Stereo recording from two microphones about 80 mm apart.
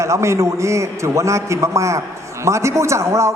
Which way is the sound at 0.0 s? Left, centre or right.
Right.